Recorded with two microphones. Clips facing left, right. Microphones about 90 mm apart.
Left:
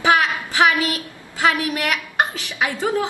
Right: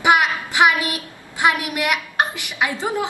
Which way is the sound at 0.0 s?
15° right (ahead or behind).